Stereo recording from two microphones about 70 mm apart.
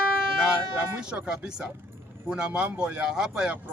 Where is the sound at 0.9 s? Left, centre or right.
Centre.